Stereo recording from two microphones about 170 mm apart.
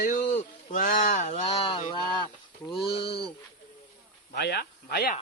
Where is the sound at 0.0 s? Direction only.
45° left (ahead or behind).